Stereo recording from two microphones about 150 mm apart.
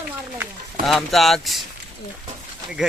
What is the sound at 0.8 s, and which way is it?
Speech, centre (ahead or behind).